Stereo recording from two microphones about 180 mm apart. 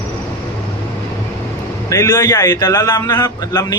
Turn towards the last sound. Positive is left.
turn(degrees=20)  # may be behind; listen again after turning